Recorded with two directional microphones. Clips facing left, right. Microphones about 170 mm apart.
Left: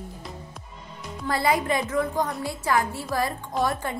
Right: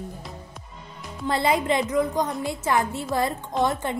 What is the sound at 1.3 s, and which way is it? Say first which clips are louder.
Music: right 1 dB; 20° right (ahead or behind).